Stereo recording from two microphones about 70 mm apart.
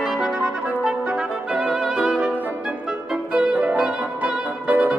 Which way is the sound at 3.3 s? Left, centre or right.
Centre.